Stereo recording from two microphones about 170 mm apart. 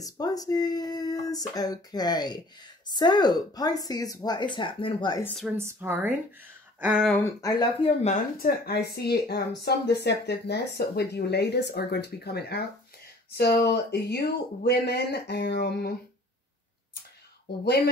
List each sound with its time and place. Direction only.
0.0 s speech: 20° left (ahead or behind)
5.2 s speech: 5° left (ahead or behind)
5.6 s speech: 15° right (ahead or behind)
7.2 s speech: 15° left (ahead or behind)
8.0 s speech: 45° left (ahead or behind)
8.5 s speech: 65° left (ahead or behind)